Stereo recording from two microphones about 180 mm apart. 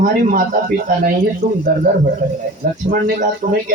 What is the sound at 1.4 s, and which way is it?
Speech, 60° right (ahead or behind).